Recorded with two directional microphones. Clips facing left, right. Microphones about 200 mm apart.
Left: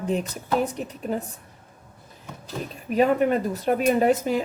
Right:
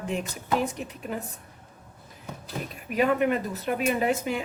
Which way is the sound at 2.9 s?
35° left (ahead or behind).